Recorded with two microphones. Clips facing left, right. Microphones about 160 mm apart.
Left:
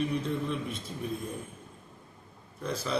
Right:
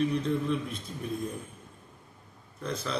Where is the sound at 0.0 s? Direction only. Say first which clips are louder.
Right 3 dB; 5° left (ahead or behind).